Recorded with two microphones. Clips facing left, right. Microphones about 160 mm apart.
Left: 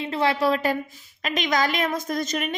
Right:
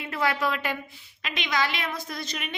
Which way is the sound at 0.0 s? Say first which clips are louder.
Left 5 dB; 25° left (ahead or behind).